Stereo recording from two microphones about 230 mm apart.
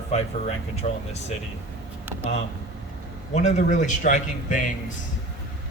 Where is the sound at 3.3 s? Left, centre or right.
Left.